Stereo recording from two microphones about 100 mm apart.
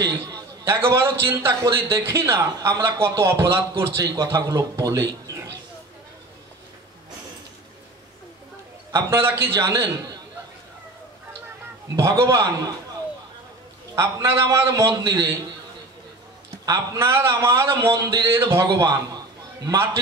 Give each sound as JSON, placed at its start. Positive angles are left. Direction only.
{"t": 0.7, "sound": "a man's voice", "side_deg": -25}
{"t": 4.0, "sound": "a man's voice", "side_deg": -40}
{"t": 8.9, "sound": "a man's voice", "side_deg": -25}
{"t": 11.9, "sound": "a man's voice", "side_deg": -35}
{"t": 13.9, "sound": "a man's voice", "side_deg": -30}
{"t": 16.6, "sound": "a man's voice", "side_deg": -35}
{"t": 18.7, "sound": "a sound", "side_deg": -40}